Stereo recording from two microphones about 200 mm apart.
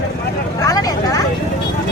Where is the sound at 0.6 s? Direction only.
20° left (ahead or behind).